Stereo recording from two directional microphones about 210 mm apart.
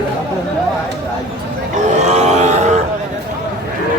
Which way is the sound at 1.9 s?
35° right (ahead or behind).